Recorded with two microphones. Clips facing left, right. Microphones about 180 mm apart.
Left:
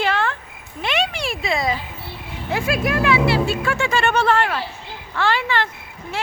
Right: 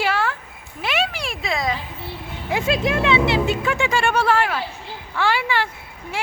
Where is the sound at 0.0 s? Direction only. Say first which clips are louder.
Left 1 dB; 10° right (ahead or behind).